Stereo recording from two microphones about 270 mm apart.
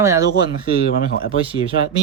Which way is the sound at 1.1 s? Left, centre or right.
Left.